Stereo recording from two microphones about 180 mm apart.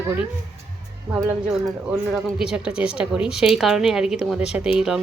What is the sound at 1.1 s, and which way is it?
Speech, 5° right (ahead or behind).